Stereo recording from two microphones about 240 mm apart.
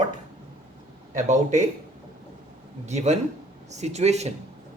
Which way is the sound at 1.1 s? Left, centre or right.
Right.